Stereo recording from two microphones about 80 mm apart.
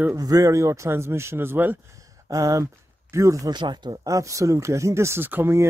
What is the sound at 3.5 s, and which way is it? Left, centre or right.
Speech, right.